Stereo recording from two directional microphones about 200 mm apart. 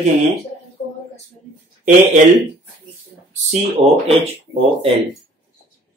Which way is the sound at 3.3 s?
35° right (ahead or behind).